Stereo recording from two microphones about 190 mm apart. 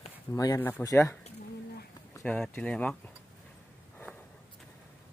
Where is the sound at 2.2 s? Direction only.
5° left (ahead or behind).